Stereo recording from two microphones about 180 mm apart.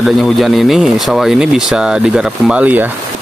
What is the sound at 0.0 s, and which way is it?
Speech, centre (ahead or behind).